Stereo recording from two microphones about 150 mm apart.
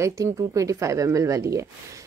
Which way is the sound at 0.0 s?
20° right (ahead or behind).